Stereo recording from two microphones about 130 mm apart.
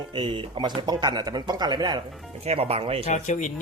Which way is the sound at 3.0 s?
65° left (ahead or behind).